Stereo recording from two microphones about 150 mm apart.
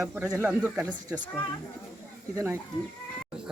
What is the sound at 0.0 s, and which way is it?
Speech, 10° right (ahead or behind).